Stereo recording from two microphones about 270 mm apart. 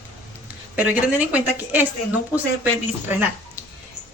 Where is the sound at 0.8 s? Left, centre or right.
Centre.